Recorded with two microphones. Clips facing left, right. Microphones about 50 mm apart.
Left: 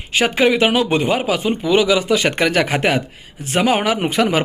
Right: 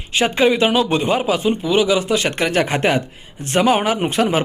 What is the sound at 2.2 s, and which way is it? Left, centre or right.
Speech, left.